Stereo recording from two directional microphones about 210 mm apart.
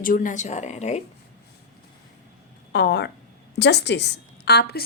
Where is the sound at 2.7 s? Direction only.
55° left (ahead or behind).